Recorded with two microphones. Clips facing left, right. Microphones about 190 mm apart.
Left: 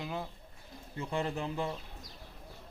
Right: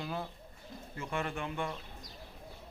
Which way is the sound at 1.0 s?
30° left (ahead or behind).